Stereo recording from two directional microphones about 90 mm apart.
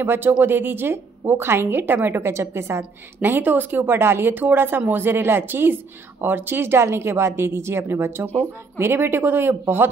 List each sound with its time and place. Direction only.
0.0 s a woman's voice: 25° right (ahead or behind)